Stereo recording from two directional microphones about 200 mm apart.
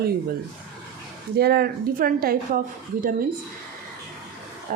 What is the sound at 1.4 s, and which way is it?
A woman's voice, 50° right (ahead or behind).